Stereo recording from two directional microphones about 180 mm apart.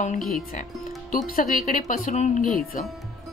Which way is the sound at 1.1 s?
45° left (ahead or behind).